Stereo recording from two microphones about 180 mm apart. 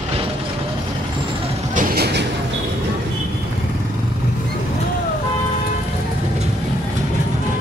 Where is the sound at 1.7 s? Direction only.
60° right (ahead or behind).